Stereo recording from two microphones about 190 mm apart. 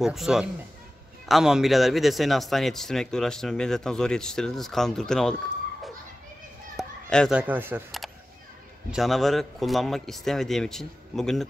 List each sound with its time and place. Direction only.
0.0 s speech: centre (ahead or behind)
6.8 s children playing: centre (ahead or behind)
7.3 s speech: 10° right (ahead or behind)
8.9 s speech: centre (ahead or behind)